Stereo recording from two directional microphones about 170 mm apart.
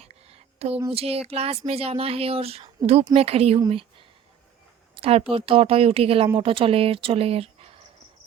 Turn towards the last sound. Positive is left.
turn(degrees=-35)  # may be behind; listen again after turning